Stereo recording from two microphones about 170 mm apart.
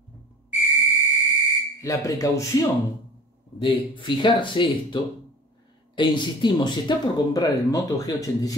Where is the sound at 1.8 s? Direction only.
20° left (ahead or behind).